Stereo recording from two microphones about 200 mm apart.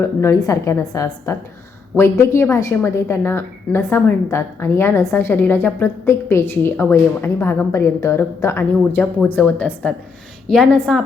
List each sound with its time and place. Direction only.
0.2 s a woman's voice: 15° left (ahead or behind)